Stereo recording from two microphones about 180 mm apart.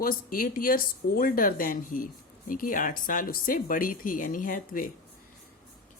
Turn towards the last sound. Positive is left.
turn(degrees=50)  # may be behind; listen again after turning